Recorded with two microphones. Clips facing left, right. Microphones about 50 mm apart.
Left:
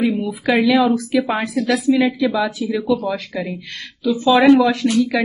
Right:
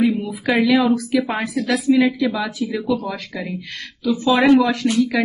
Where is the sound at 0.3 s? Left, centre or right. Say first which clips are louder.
Left 1 dB; centre.